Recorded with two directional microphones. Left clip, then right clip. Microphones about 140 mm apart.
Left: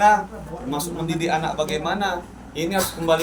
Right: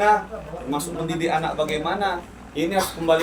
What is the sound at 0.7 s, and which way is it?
A man's voice, 10° right (ahead or behind).